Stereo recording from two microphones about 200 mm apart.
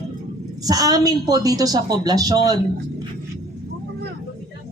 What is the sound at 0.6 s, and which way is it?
A woman's voice, 20° right (ahead or behind).